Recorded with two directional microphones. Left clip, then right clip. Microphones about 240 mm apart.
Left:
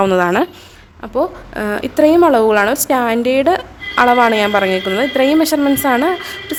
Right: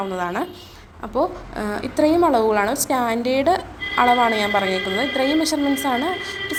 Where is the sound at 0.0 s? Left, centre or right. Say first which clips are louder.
Left 11 dB; left.